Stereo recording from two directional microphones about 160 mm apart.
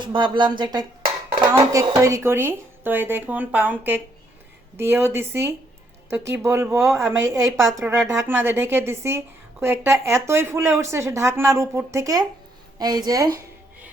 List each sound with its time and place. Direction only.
0.0 s a woman's voice: 30° right (ahead or behind)